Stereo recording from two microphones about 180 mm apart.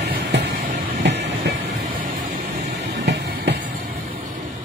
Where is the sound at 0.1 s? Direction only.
70° right (ahead or behind).